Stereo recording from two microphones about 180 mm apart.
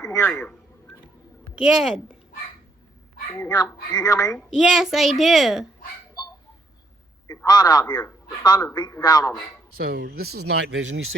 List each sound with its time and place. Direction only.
0.0 s a sound: 15° left (ahead or behind)
0.3 s a child's voice: 5° left (ahead or behind)
1.5 s a child's voice: 5° right (ahead or behind)
3.5 s speech: 20° left (ahead or behind)
4.4 s a child's voice: centre (ahead or behind)
7.3 s speech: 20° left (ahead or behind)
9.7 s speech: 60° right (ahead or behind); by 11.1 s 90° right